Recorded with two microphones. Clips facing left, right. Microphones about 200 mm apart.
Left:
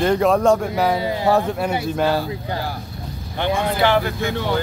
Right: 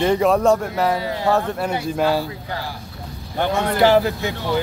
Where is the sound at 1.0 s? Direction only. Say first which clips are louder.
Left 2 dB; 15° left (ahead or behind).